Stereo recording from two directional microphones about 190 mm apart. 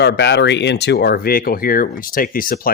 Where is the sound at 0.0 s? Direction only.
60° left (ahead or behind).